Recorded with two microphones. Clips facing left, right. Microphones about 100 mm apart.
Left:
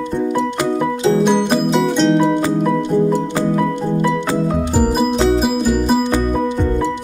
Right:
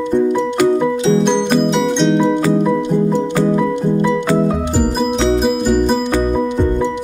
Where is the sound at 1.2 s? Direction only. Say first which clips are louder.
Right 1 dB; 5° left (ahead or behind).